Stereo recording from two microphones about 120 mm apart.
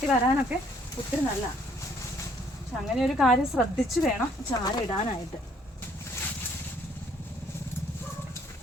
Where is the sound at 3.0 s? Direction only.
Centre (ahead or behind).